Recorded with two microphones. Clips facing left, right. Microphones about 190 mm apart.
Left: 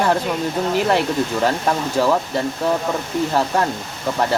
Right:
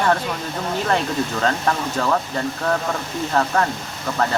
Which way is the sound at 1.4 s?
10° left (ahead or behind).